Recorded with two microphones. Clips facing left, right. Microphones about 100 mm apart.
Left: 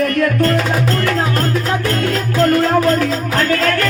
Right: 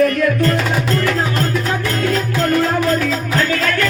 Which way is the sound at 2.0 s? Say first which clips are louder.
Left 2 dB; 45° left (ahead or behind).